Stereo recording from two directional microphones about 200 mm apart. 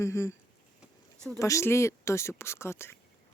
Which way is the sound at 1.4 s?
15° left (ahead or behind).